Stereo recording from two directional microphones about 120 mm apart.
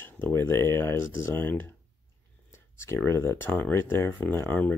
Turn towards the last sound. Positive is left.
turn(degrees=15)  # may be behind; listen again after turning